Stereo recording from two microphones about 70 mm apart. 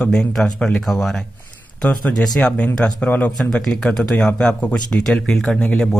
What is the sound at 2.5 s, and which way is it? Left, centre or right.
Speech, centre.